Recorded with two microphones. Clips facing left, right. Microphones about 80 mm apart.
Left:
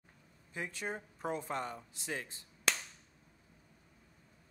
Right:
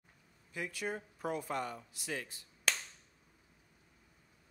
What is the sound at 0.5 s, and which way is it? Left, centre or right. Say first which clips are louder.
Speech: right 1 dB; left.